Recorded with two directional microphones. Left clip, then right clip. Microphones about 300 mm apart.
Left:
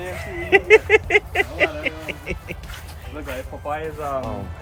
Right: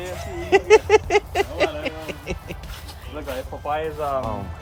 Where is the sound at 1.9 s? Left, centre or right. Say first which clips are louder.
Left 1 dB; centre.